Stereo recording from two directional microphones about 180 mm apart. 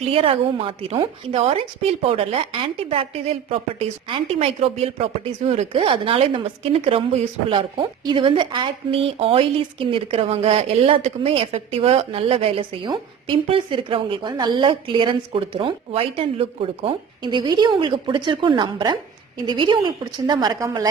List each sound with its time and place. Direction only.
0.0 s a woman's voice: 30° right (ahead or behind)